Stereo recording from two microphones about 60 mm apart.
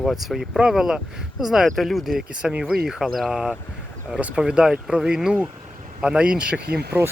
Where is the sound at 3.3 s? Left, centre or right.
Centre.